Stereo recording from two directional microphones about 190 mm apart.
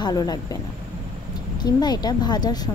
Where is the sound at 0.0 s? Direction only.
20° left (ahead or behind).